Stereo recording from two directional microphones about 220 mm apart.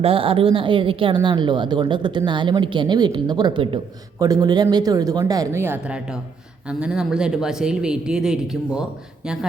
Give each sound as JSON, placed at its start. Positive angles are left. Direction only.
{"t": 0.0, "sound": "a woman's voice", "side_deg": -25}